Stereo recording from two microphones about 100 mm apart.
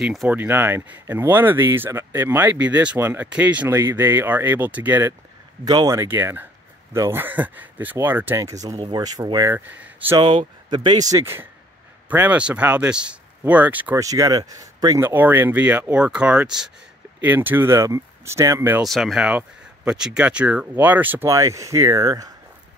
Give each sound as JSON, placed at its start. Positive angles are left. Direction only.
{"t": 0.0, "sound": "speech", "side_deg": 0}
{"t": 0.3, "sound": "speech", "side_deg": -20}
{"t": 3.6, "sound": "speech", "side_deg": -25}
{"t": 5.7, "sound": "speech", "side_deg": -40}
{"t": 6.0, "sound": "speech", "side_deg": -20}
{"t": 8.4, "sound": "speech", "side_deg": -35}
{"t": 9.5, "sound": "speech", "side_deg": -15}
{"t": 10.1, "sound": "speech", "side_deg": -50}
{"t": 12.1, "sound": "speech", "side_deg": -15}
{"t": 13.9, "sound": "speech", "side_deg": -35}
{"t": 15.0, "sound": "speech", "side_deg": -20}
{"t": 17.2, "sound": "speech", "side_deg": -20}
{"t": 18.8, "sound": "speech", "side_deg": 0}
{"t": 21.3, "sound": "speech", "side_deg": -35}